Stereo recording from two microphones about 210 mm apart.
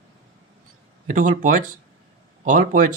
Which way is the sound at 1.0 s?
35° right (ahead or behind).